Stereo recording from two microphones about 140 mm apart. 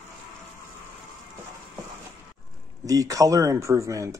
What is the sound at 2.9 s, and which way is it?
Speech, 25° right (ahead or behind).